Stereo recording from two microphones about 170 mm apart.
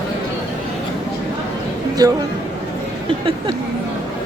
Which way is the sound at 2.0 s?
25° right (ahead or behind).